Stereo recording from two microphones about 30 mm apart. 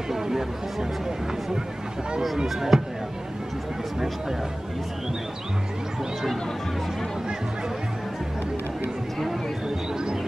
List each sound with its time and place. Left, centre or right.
0.1 s speech: centre
2.4 s speech: centre